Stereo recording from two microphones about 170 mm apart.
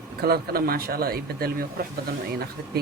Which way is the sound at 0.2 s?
65° right (ahead or behind).